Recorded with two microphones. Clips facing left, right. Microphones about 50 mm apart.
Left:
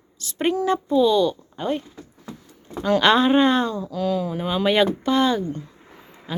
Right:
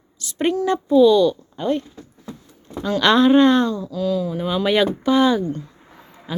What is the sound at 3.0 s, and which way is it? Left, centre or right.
Speech, centre.